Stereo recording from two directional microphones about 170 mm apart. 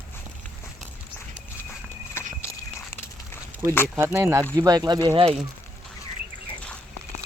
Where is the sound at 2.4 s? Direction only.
15° left (ahead or behind).